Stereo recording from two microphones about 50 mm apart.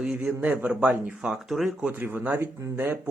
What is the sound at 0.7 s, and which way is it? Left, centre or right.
Speech, right.